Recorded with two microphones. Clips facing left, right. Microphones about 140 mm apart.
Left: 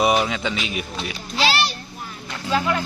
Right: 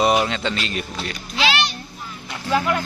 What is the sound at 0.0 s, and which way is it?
Speech, centre (ahead or behind).